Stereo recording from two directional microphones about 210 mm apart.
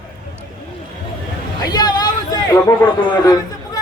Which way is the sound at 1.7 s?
20° left (ahead or behind).